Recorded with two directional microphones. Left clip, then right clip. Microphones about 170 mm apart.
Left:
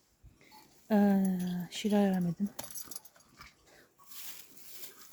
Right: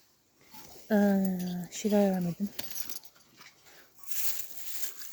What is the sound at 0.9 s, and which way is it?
Speech, 20° left (ahead or behind).